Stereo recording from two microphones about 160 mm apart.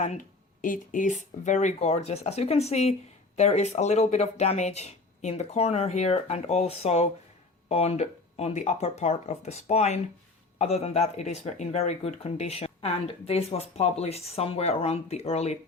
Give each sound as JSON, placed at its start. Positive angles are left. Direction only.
{"t": 0.6, "sound": "speech", "side_deg": 55}